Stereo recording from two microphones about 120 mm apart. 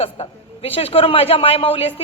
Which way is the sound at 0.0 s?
55° left (ahead or behind).